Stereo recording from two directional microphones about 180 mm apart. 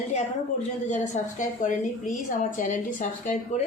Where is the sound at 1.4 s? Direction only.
45° left (ahead or behind).